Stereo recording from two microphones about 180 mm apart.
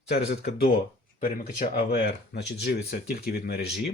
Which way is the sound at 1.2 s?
45° left (ahead or behind).